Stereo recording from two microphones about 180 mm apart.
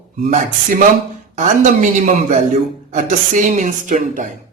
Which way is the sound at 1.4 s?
45° right (ahead or behind).